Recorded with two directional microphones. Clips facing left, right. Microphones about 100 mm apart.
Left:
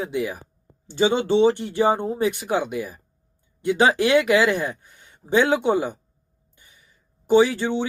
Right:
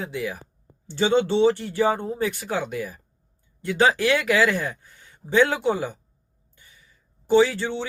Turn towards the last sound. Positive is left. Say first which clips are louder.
# left 2 dB
turn(degrees=15)  # may be behind; listen again after turning